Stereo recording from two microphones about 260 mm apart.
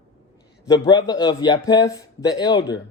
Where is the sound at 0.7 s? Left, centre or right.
Centre.